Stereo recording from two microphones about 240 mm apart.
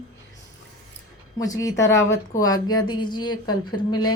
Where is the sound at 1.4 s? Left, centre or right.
Centre.